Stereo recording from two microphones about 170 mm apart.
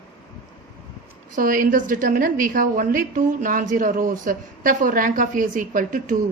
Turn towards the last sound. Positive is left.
turn(degrees=-50)  # may be behind; listen again after turning